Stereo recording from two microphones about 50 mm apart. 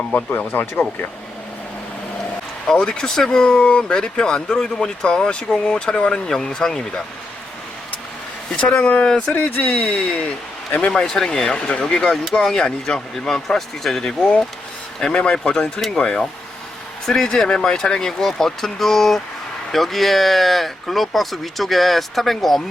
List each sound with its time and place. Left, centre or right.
0.1 s speech: left
2.7 s speech: centre
8.5 s speech: left
9.6 s a man's voice: left
10.9 s speech: centre
12.4 s speech: centre
15.0 s speech: centre
17.3 s speech: centre